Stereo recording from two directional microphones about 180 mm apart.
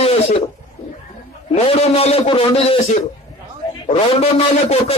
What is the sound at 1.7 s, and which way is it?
Speech, 35° left (ahead or behind).